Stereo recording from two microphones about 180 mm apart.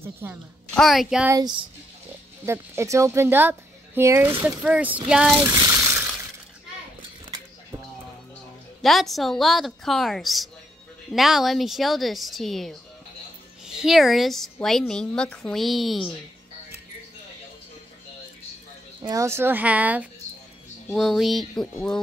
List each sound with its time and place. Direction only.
0.0 s speech: 15° right (ahead or behind)
0.7 s a woman's voice: centre (ahead or behind)
1.3 s speech: 20° right (ahead or behind); by 5.4 s 5° right (ahead or behind)
5.4 s a sound: 20° right (ahead or behind)
8.8 s a woman's voice: centre (ahead or behind)
19.0 s a woman's voice: 15° right (ahead or behind); by 21.6 s centre (ahead or behind)